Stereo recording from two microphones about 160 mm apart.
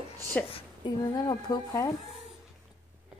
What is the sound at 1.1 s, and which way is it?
Speech, 25° left (ahead or behind).